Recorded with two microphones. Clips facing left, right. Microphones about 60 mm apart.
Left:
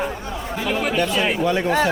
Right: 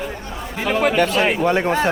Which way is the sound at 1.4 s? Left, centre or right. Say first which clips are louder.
Right 2 dB; right.